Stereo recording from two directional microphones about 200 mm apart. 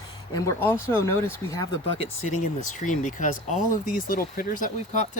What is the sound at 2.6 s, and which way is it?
Speech, 40° left (ahead or behind).